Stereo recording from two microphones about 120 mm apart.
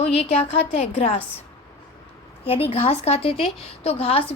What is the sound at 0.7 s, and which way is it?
Speech, 65° left (ahead or behind).